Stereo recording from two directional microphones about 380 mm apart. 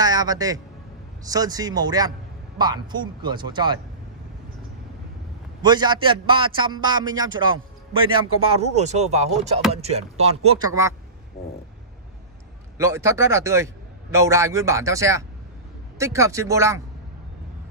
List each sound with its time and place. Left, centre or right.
0.0 s a man's voice: centre
5.6 s speech: centre
12.7 s speech: centre